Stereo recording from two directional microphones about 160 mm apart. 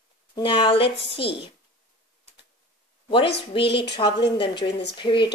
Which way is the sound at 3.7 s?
90° left.